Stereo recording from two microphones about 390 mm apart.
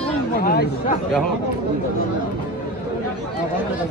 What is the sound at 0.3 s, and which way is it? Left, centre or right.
Speech, left.